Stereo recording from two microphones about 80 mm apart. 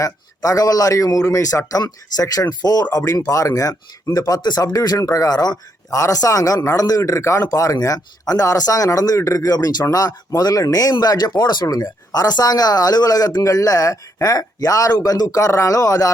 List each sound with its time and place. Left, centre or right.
0.0 s speech: left